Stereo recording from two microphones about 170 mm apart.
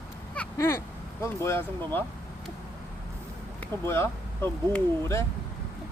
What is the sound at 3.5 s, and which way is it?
Speech, 15° left (ahead or behind).